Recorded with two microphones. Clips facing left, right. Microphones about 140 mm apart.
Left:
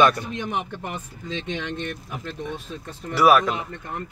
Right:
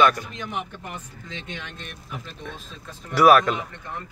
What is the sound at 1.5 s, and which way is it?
Speech, 85° left.